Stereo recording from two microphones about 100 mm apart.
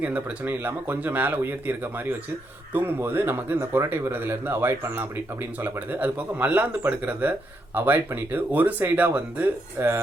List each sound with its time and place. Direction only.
0.0 s speech: 15° right (ahead or behind)